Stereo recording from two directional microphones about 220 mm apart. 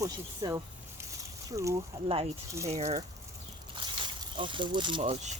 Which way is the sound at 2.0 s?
25° right (ahead or behind).